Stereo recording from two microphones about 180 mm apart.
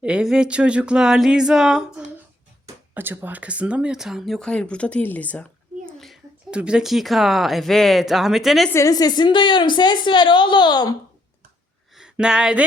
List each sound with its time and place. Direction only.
0.0 s speech: 5° right (ahead or behind)
8.7 s a woman's voice: 20° left (ahead or behind)
11.9 s speech: 5° right (ahead or behind)